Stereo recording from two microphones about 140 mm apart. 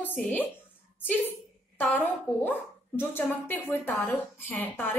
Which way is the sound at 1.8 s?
10° left (ahead or behind).